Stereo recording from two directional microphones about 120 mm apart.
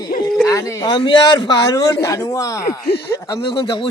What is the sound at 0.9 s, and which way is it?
Speech, 45° left (ahead or behind).